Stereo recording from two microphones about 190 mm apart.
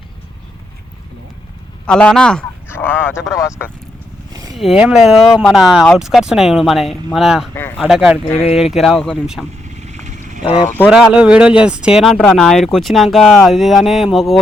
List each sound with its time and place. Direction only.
1.9 s a sound: 5° left (ahead or behind)
3.3 s speech: 15° left (ahead or behind)
4.5 s speech: centre (ahead or behind)
7.5 s a sound: 10° left (ahead or behind)
7.9 s speech: 5° right (ahead or behind)
9.6 s vehicle: 35° right (ahead or behind)
10.4 s speech: 30° left (ahead or behind)
10.8 s speech: 5° right (ahead or behind)